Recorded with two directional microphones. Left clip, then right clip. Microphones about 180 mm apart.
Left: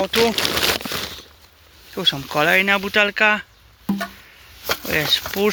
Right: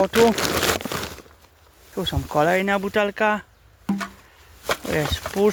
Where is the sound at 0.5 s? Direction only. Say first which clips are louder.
Left 2 dB; 45° right (ahead or behind).